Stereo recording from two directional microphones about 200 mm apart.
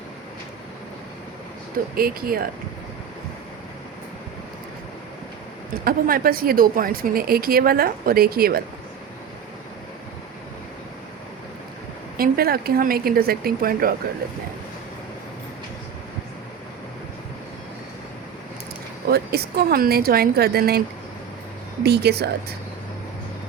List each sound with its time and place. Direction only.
2.0 s speech: 45° right (ahead or behind)
5.7 s speech: 45° right (ahead or behind)
12.1 s speech: 50° right (ahead or behind)
19.0 s speech: 50° right (ahead or behind)
21.8 s speech: 55° right (ahead or behind)